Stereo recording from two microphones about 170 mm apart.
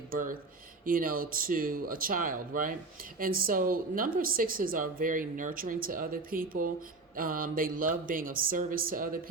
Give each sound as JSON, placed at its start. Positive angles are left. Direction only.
{"t": 0.1, "sound": "a woman's voice", "side_deg": -55}